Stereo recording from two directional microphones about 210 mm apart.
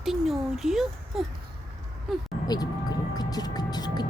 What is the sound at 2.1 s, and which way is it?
Speech, centre (ahead or behind).